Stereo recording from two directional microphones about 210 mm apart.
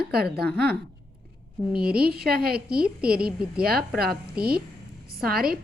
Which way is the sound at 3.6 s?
45° right (ahead or behind).